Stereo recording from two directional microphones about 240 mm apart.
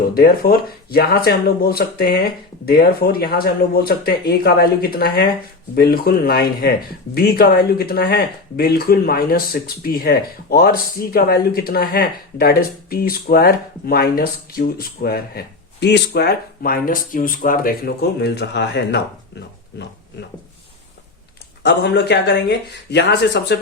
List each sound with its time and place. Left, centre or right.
0.1 s speech: left
21.6 s speech: left